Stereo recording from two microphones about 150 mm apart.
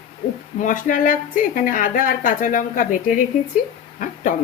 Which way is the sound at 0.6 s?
60° left (ahead or behind).